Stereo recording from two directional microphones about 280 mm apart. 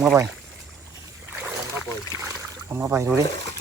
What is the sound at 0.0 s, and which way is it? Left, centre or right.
Speech, centre.